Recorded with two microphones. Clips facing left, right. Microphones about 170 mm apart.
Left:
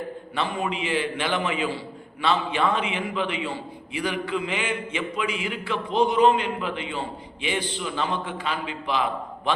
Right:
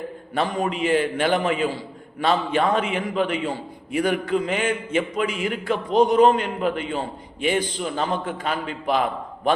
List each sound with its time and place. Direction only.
0.3 s a man's voice: 40° right (ahead or behind)